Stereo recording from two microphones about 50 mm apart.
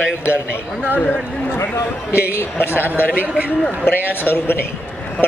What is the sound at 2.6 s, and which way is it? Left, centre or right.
Speech, right.